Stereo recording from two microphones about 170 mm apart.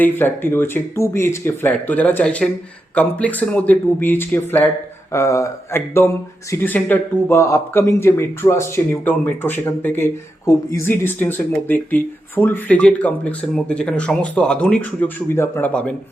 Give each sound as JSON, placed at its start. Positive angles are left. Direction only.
{"t": 0.0, "sound": "speech", "side_deg": 10}